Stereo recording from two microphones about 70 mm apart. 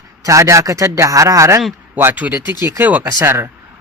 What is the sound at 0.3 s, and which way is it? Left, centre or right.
A man's voice, right.